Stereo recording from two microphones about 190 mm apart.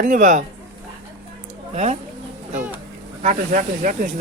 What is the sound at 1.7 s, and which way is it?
Speech, 35° right (ahead or behind).